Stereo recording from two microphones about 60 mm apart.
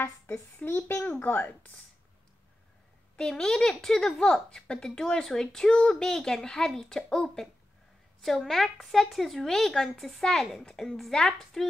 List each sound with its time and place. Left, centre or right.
0.7 s a child's voice: left
3.2 s a woman's voice: centre
10.6 s a woman's voice: centre